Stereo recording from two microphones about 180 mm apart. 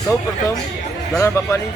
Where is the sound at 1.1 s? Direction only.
15° left (ahead or behind).